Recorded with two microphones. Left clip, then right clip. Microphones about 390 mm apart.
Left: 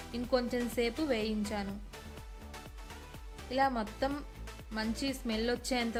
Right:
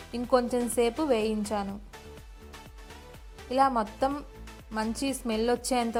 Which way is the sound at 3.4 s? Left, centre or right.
Centre.